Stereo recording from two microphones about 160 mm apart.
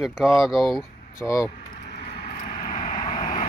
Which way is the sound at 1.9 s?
90° left.